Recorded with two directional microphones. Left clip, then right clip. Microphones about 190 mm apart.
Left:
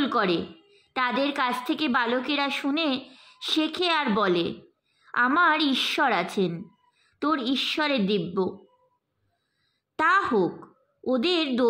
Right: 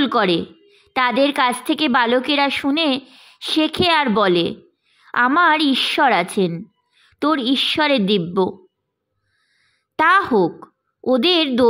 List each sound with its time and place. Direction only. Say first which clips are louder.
0.0 s a woman's voice: right 7 dB; 35° right (ahead or behind)
9.9 s a woman's voice: right 7 dB; 35° right (ahead or behind)